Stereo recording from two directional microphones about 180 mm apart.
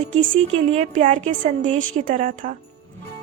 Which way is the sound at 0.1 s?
40° right (ahead or behind).